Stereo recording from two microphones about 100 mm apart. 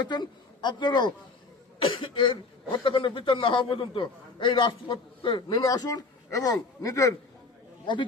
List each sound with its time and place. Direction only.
0.0 s a woman's voice: 45° left (ahead or behind)
1.8 s a man's voice: 60° left (ahead or behind)
5.6 s speech: 40° left (ahead or behind)